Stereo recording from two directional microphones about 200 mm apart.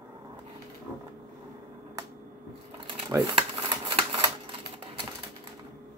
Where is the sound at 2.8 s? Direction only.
25° right (ahead or behind).